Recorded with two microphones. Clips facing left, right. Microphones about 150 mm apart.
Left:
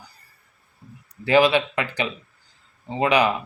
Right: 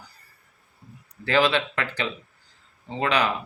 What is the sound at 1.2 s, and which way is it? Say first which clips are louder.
Speech: left 4 dB; 15° left (ahead or behind).